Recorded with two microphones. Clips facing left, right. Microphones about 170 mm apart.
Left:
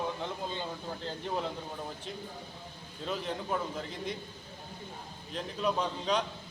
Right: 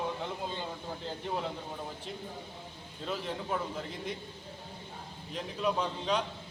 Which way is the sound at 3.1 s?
5° right (ahead or behind).